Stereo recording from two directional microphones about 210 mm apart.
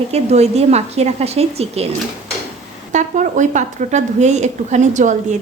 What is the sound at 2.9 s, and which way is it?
A woman's voice, 35° right (ahead or behind).